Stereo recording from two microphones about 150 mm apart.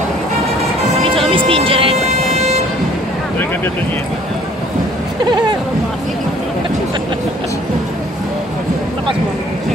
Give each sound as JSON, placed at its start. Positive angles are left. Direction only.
{"t": 1.5, "sound": "music", "side_deg": -35}
{"t": 5.2, "sound": "chatter", "side_deg": -30}